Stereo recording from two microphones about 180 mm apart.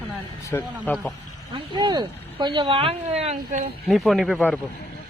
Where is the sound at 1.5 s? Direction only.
25° right (ahead or behind).